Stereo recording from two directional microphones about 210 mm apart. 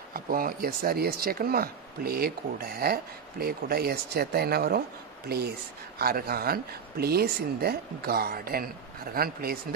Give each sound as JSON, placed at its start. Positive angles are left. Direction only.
{"t": 0.1, "sound": "speech", "side_deg": -45}
{"t": 5.9, "sound": "speech", "side_deg": -45}